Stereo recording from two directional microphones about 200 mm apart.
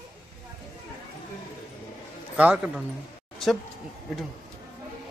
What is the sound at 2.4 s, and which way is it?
Speech, 5° right (ahead or behind).